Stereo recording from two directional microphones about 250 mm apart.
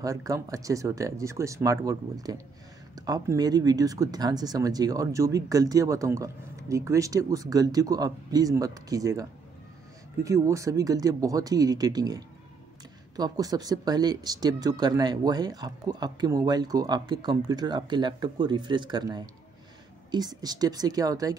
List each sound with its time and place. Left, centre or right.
0.0 s speech: centre
10.2 s speech: centre